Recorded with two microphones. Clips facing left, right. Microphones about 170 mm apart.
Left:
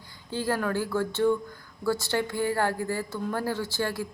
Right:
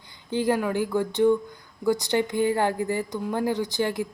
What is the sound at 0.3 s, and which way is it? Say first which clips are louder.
A woman's voice: right 4 dB; 15° right (ahead or behind).